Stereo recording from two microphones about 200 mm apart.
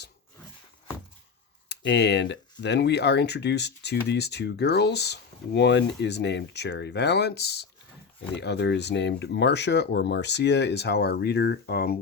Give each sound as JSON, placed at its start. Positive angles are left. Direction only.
{"t": 1.7, "sound": "speech", "side_deg": 60}